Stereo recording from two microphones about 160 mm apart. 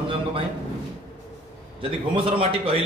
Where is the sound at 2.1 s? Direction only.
35° right (ahead or behind).